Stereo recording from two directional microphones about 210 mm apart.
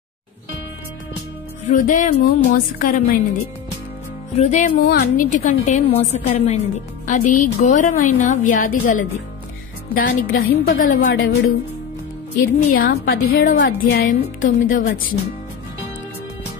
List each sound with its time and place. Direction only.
1.7 s a woman's voice: 40° left (ahead or behind)
4.4 s a woman's voice: 35° left (ahead or behind)
11.1 s speech: 75° left (ahead or behind)
12.4 s a woman's voice: 45° left (ahead or behind)